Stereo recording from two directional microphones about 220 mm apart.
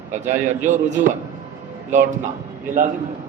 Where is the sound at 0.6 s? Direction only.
35° right (ahead or behind).